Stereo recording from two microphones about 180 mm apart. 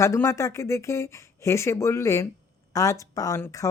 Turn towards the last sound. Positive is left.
turn(degrees=15)  # may be behind; listen again after turning